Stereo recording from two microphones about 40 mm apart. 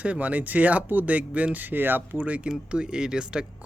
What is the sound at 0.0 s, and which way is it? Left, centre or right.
Speech, right.